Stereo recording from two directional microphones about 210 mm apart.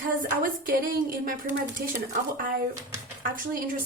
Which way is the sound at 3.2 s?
40° right (ahead or behind).